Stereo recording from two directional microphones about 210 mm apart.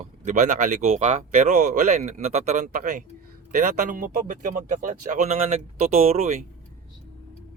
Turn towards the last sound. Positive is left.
turn(degrees=-30)  # may be behind; listen again after turning